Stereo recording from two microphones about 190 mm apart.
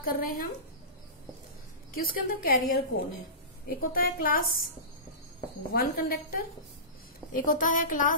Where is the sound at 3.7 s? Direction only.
50° left (ahead or behind).